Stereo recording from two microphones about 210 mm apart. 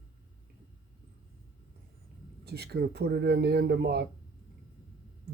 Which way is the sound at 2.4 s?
50° right (ahead or behind).